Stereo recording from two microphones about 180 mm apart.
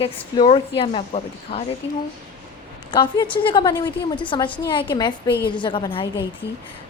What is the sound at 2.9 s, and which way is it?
A woman's voice, 25° left (ahead or behind).